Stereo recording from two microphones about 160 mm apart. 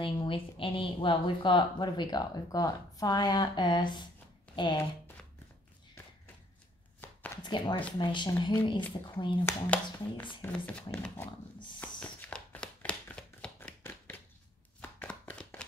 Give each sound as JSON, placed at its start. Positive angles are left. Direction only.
{"t": 0.0, "sound": "speech", "side_deg": 35}
{"t": 7.0, "sound": "a sound", "side_deg": 15}
{"t": 7.4, "sound": "speech", "side_deg": 30}
{"t": 9.5, "sound": "speech", "side_deg": 10}
{"t": 11.8, "sound": "a sound", "side_deg": 5}
{"t": 14.8, "sound": "chopping", "side_deg": 10}